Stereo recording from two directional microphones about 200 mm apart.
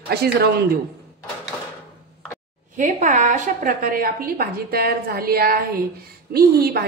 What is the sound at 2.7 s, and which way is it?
A woman's voice, 40° right (ahead or behind).